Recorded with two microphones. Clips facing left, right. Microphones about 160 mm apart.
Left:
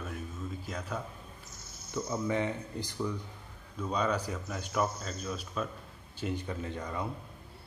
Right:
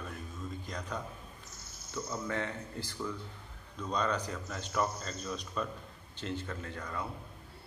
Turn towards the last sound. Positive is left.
turn(degrees=20)  # may be behind; listen again after turning